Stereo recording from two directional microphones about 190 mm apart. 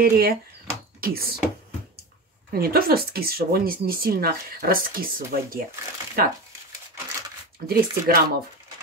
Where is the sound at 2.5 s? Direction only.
50° right (ahead or behind).